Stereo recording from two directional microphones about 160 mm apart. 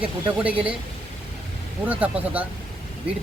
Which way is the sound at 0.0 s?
10° right (ahead or behind).